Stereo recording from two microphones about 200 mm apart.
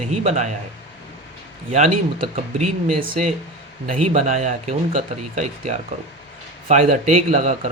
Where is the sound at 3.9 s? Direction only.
35° right (ahead or behind).